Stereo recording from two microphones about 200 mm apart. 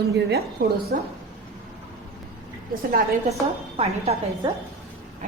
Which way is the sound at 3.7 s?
30° right (ahead or behind).